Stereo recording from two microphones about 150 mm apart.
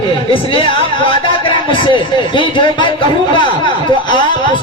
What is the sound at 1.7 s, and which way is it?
Speech, 35° left (ahead or behind).